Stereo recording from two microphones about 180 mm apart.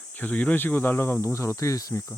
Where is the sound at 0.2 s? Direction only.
10° left (ahead or behind).